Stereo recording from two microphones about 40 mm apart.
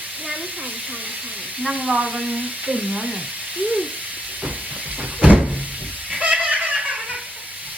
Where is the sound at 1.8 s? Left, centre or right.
Right.